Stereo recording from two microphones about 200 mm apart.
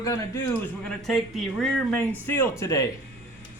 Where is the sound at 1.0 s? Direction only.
Centre (ahead or behind).